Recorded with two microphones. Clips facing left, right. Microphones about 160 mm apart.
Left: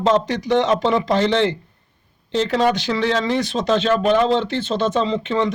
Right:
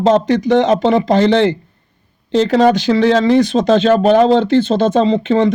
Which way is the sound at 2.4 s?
40° right (ahead or behind).